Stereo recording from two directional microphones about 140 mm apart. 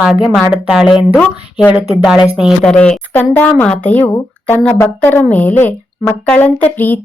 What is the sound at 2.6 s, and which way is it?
Speech, 5° left (ahead or behind).